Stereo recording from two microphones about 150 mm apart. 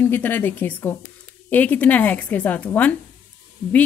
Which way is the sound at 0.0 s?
15° left (ahead or behind).